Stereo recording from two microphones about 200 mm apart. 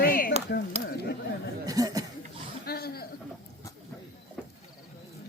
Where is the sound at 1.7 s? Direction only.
20° right (ahead or behind).